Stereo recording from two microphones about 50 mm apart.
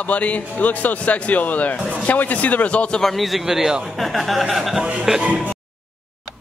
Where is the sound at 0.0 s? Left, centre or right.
Left.